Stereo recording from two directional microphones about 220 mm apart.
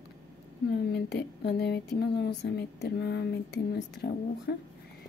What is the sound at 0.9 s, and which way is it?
Speech, 50° left (ahead or behind).